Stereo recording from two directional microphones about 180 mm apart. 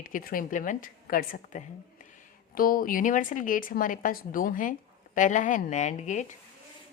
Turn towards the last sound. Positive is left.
turn(degrees=40)  # may be behind; listen again after turning